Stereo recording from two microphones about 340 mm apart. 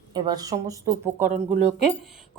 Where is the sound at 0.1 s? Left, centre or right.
Centre.